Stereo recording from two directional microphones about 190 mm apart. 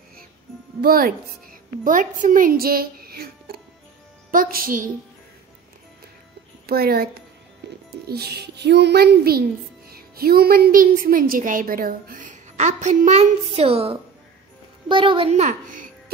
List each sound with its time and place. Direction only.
0.7 s a woman's voice: 50° right (ahead or behind)
6.6 s a woman's voice: 55° right (ahead or behind)